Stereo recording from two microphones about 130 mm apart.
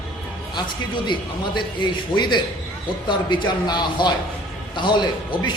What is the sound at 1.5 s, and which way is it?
Speech, 35° left (ahead or behind).